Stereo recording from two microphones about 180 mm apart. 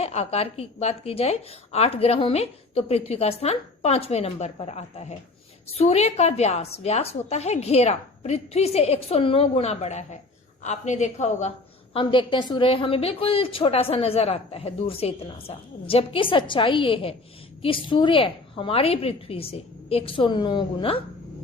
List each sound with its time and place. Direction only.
0.0 s a woman's voice: 35° left (ahead or behind)
11.9 s a woman's voice: 25° left (ahead or behind)